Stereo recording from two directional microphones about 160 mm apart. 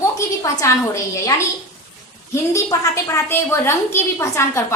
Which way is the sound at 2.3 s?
20° left (ahead or behind).